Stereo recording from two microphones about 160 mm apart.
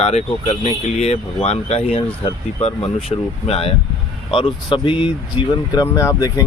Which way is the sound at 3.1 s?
25° left (ahead or behind).